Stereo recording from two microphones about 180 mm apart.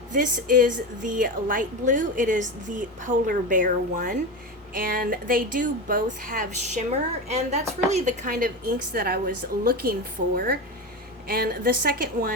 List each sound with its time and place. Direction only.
0.1 s a woman's voice: 50° right (ahead or behind)
7.3 s a woman's voice: 40° right (ahead or behind); by 12.3 s 55° right (ahead or behind)